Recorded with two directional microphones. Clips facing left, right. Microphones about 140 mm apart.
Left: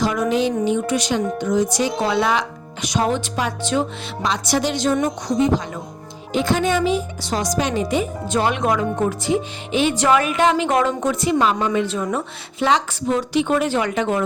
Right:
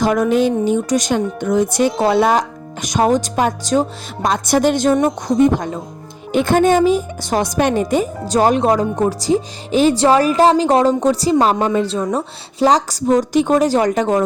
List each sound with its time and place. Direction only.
0.0 s a woman's voice: 50° right (ahead or behind)